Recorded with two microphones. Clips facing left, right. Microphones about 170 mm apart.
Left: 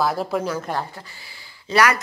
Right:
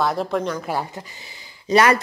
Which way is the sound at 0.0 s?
Centre (ahead or behind).